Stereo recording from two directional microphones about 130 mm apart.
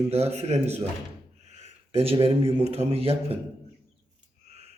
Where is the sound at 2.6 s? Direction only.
50° right (ahead or behind).